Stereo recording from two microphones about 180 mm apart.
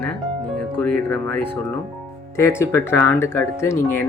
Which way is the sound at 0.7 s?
5° left (ahead or behind).